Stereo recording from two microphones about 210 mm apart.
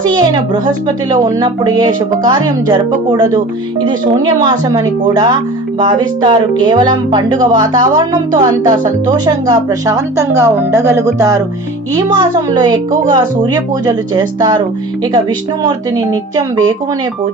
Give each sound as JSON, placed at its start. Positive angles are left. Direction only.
{"t": 0.1, "sound": "a woman's voice", "side_deg": -20}
{"t": 15.6, "sound": "speech", "side_deg": -20}